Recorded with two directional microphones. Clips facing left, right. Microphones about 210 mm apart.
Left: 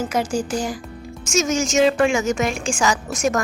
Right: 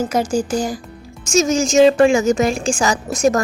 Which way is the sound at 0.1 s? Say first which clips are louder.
Right 4 dB; 40° right (ahead or behind).